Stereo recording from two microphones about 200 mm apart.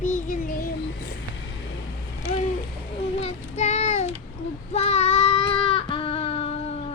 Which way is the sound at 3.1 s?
35° left (ahead or behind).